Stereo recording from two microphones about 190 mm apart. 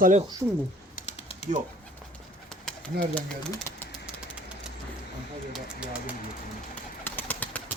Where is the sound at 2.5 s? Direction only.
5° left (ahead or behind).